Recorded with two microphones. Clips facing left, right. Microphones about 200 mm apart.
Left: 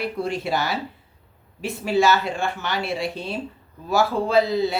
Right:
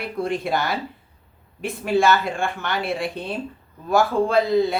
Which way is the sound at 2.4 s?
55° right (ahead or behind).